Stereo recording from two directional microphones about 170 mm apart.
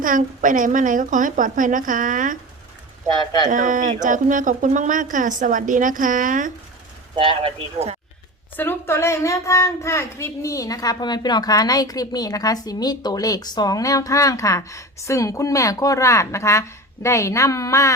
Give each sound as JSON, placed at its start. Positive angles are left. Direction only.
{"t": 0.0, "sound": "speech", "side_deg": -50}
{"t": 3.5, "sound": "speech", "side_deg": -50}
{"t": 7.4, "sound": "speech", "side_deg": -40}
{"t": 8.5, "sound": "speech", "side_deg": 15}